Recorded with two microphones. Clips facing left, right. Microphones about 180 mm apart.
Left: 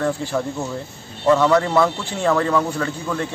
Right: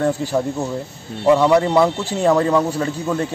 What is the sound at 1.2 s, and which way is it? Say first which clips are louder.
A man's voice: right 2 dB; 15° right (ahead or behind).